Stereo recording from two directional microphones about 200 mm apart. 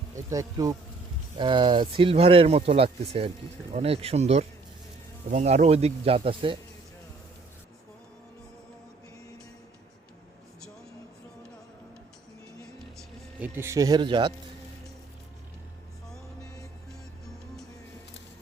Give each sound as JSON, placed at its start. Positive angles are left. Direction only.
{"t": 0.3, "sound": "speech", "side_deg": -15}
{"t": 13.0, "sound": "a man's voice", "side_deg": -10}